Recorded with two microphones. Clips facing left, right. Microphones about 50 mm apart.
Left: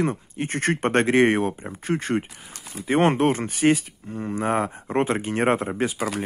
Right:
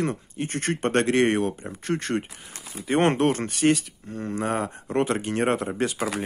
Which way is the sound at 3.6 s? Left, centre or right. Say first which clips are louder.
Left 2 dB; centre.